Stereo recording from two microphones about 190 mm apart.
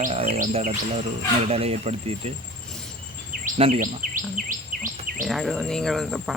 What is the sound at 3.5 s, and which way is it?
Speech, 30° right (ahead or behind).